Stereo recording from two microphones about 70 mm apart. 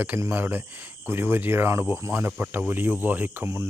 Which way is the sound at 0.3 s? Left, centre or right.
Right.